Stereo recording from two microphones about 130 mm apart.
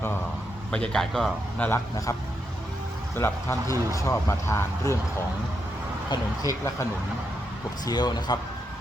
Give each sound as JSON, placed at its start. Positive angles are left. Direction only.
{"t": 0.7, "sound": "speech", "side_deg": 5}
{"t": 1.6, "sound": "speech", "side_deg": 15}
{"t": 3.2, "sound": "speech", "side_deg": 20}
{"t": 6.1, "sound": "speech", "side_deg": 25}
{"t": 7.9, "sound": "a man's voice", "side_deg": 30}